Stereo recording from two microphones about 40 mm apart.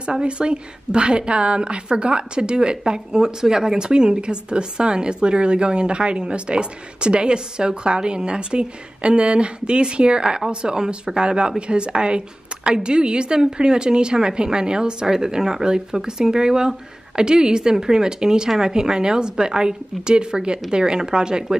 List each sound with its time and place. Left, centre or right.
0.0 s a woman's voice: right